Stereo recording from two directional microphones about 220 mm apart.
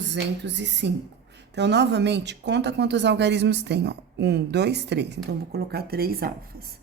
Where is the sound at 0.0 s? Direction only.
55° right (ahead or behind).